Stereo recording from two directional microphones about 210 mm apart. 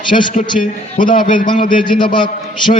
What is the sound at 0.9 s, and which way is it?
Speech, 40° left (ahead or behind).